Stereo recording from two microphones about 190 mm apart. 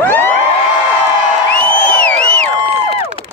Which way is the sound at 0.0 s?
10° left (ahead or behind).